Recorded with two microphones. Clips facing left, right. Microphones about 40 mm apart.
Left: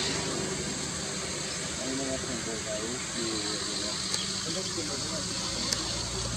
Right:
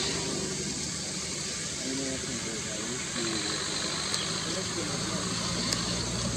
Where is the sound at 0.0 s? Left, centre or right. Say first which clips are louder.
Left 1 dB; centre.